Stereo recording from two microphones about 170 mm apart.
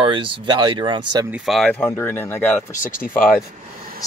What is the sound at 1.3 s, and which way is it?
Speech, centre (ahead or behind).